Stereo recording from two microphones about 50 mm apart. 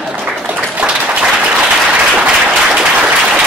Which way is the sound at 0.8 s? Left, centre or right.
Right.